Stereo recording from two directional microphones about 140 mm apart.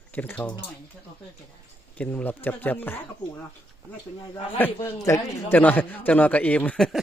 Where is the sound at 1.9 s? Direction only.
10° left (ahead or behind).